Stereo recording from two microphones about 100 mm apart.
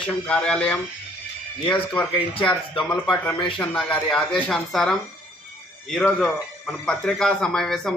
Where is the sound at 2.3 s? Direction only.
60° left (ahead or behind).